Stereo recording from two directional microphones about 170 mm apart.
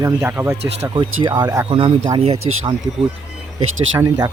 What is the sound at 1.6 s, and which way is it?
Speech, 30° right (ahead or behind).